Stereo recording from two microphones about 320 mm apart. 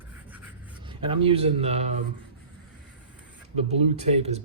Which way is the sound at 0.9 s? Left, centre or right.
Centre.